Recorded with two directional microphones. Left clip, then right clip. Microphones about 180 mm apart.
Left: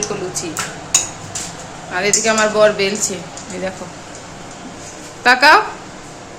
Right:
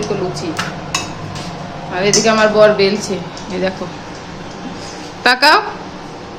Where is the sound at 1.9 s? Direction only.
10° left (ahead or behind).